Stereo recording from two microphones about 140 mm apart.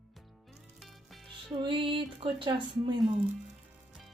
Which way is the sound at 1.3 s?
35° right (ahead or behind).